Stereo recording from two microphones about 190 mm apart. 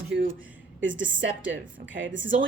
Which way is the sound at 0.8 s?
80° right.